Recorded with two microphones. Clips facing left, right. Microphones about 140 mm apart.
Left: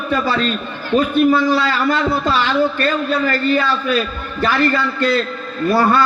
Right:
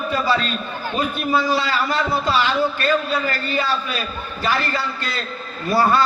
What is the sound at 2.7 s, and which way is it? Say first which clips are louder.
A man's voice: left 2 dB; 45° left (ahead or behind).